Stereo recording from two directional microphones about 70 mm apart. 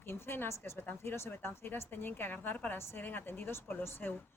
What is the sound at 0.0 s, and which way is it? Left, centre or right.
A woman's voice, left.